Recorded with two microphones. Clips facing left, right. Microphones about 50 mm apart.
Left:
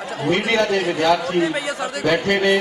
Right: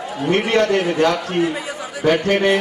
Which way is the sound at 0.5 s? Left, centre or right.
Right.